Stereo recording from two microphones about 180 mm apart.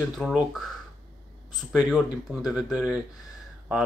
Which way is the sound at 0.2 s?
Centre (ahead or behind).